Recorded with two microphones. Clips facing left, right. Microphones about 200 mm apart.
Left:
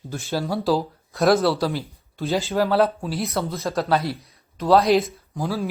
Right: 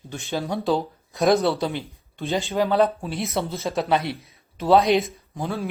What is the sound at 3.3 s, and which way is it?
Speech, 25° right (ahead or behind).